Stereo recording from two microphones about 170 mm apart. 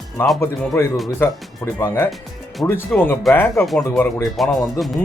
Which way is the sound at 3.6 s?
Centre (ahead or behind).